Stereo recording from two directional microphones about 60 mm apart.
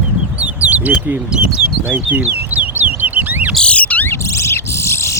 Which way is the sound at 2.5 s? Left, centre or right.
Right.